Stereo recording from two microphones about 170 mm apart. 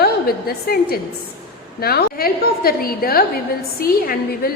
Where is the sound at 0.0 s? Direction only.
65° left (ahead or behind).